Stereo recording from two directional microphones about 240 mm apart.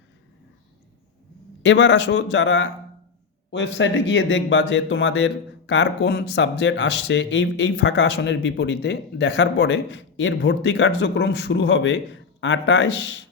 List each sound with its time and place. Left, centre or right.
1.6 s speech: left